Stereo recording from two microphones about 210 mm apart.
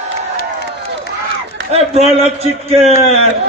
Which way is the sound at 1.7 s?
30° right (ahead or behind).